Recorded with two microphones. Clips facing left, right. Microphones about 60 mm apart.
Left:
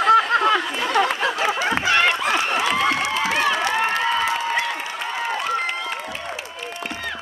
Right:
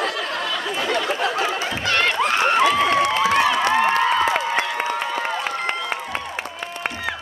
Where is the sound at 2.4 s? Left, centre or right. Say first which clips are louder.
Right 4 dB; right.